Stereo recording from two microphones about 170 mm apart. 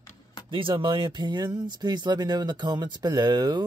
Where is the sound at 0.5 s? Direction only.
30° right (ahead or behind).